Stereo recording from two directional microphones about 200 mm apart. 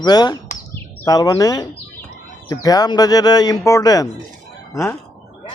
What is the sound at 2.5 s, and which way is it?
Speech, 20° left (ahead or behind).